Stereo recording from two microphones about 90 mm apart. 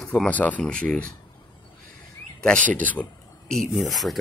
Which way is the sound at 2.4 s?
10° left (ahead or behind).